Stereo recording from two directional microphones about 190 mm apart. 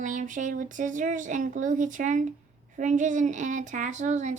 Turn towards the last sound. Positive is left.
turn(degrees=-40)  # may be behind; listen again after turning